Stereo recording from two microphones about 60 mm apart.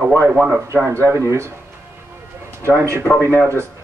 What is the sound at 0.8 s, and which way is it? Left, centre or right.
Speech, right.